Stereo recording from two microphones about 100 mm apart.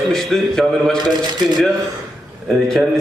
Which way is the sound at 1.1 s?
45° right (ahead or behind).